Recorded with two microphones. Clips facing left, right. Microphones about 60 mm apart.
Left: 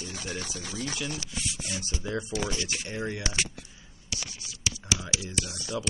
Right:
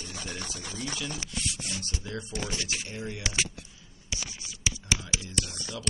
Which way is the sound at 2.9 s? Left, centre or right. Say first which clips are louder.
Left 4 dB; left.